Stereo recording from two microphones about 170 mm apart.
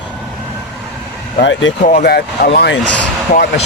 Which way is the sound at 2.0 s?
70° left (ahead or behind).